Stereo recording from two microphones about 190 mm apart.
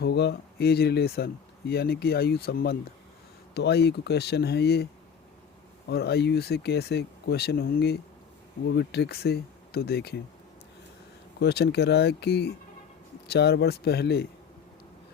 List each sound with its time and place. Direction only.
0.0 s speech: 60° left (ahead or behind)
5.9 s speech: 60° left (ahead or behind)
11.3 s speech: 60° left (ahead or behind)